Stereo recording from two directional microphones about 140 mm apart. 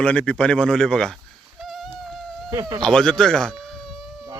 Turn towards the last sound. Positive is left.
turn(degrees=0)  # may be behind; listen again after turning